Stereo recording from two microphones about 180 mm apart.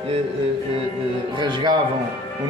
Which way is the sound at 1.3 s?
25° right (ahead or behind).